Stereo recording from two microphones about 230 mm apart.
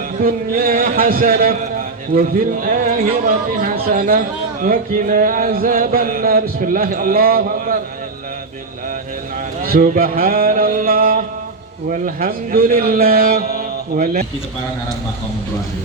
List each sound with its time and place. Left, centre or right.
0.2 s a man's voice: right
9.6 s a man's voice: right